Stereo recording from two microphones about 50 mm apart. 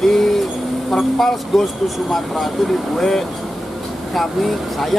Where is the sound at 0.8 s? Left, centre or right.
Centre.